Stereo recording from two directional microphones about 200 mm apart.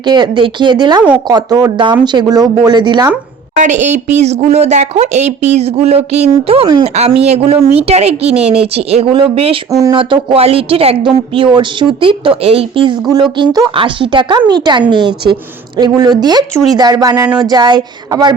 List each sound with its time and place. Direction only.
0.0 s a woman's voice: 20° right (ahead or behind)
3.5 s a woman's voice: 35° right (ahead or behind); by 18.3 s 20° right (ahead or behind)